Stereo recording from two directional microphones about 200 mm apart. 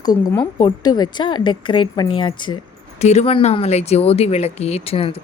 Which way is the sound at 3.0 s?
35° left (ahead or behind).